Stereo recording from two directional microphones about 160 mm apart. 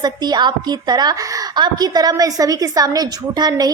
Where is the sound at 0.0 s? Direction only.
25° right (ahead or behind).